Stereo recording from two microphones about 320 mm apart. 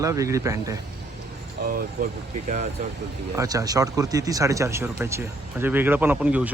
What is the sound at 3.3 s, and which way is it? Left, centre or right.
Speech, centre.